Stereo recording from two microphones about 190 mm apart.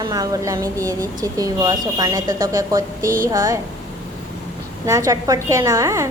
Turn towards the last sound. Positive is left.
turn(degrees=-15)  # may be behind; listen again after turning